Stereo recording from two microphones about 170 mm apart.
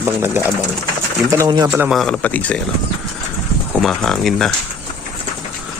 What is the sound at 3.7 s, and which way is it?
Speech, centre (ahead or behind).